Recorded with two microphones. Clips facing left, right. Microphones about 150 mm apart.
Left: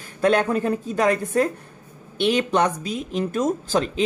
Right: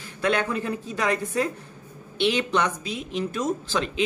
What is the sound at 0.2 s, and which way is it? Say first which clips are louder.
A woman's voice: left 5 dB; 45° left (ahead or behind).